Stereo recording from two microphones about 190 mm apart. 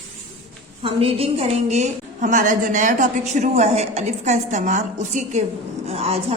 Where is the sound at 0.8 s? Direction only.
30° right (ahead or behind).